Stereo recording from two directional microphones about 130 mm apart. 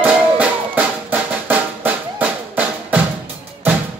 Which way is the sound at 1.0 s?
15° right (ahead or behind).